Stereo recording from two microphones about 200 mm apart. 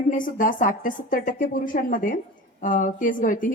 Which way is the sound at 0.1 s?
40° left (ahead or behind).